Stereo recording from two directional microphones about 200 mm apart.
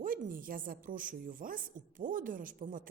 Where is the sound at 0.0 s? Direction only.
45° right (ahead or behind).